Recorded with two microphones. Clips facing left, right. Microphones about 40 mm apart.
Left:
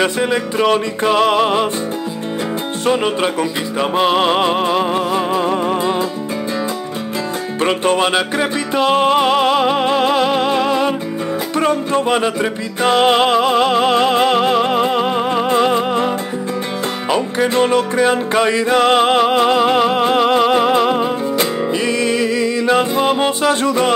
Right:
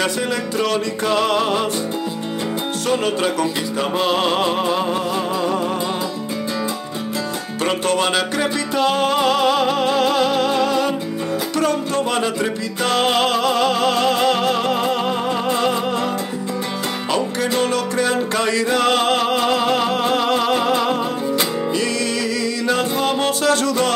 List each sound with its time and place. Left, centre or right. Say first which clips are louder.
0.0 s music: left 4 dB; left
2.9 s music: left 3 dB; left
7.6 s music: left 3 dB; left
17.1 s music: left 4 dB; left